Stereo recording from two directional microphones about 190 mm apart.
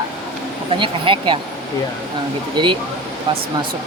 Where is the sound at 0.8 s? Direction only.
25° right (ahead or behind).